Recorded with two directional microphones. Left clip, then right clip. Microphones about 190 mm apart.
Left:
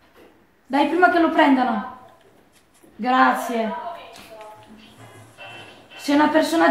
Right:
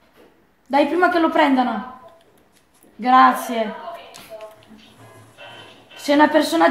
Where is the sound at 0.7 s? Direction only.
55° right (ahead or behind).